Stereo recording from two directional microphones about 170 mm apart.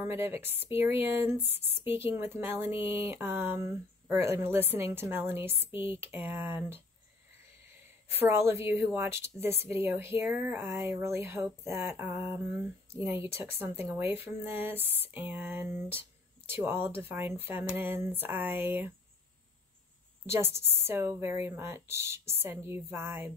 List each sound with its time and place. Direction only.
0.0 s speech: 15° right (ahead or behind)
8.1 s speech: 15° right (ahead or behind)
20.2 s speech: 15° right (ahead or behind)